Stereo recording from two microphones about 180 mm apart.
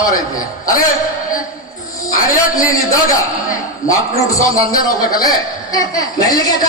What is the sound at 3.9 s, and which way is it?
A man's voice, 20° left (ahead or behind).